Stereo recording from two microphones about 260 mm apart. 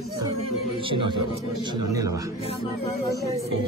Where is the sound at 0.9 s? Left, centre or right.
Centre.